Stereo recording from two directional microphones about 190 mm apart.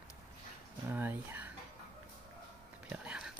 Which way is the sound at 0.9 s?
10° right (ahead or behind).